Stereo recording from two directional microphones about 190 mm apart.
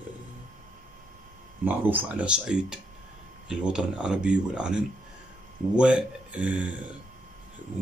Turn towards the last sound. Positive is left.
turn(degrees=-5)  # may be behind; listen again after turning